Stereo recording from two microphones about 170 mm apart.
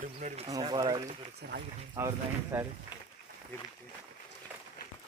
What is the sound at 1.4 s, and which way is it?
Speech, 70° right (ahead or behind).